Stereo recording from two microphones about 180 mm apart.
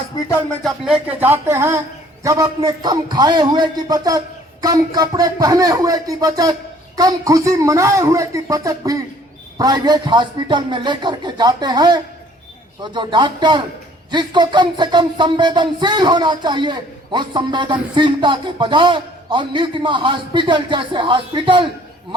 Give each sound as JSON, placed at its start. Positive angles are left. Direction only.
{"t": 0.6, "sound": "speech", "side_deg": -5}